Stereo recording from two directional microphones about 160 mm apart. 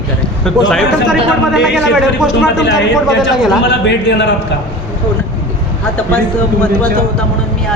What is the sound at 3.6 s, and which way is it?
Speech, 90° left.